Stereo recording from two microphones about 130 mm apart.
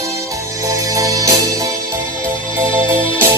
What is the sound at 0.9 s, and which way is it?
Music, 25° right (ahead or behind).